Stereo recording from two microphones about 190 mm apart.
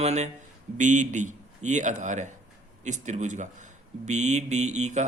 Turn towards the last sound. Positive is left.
turn(degrees=-35)  # may be behind; listen again after turning